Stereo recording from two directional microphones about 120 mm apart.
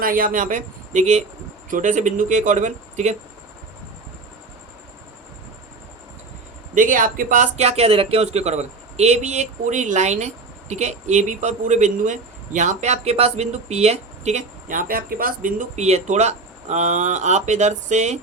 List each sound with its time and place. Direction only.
0.3 s speech: 90° right
6.7 s speech: 90° right; by 18.2 s 75° right (ahead or behind)